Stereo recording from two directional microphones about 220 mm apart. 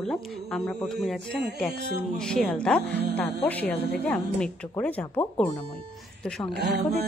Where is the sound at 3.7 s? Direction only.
45° left (ahead or behind).